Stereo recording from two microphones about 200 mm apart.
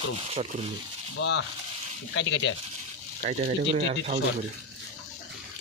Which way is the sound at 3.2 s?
40° right (ahead or behind).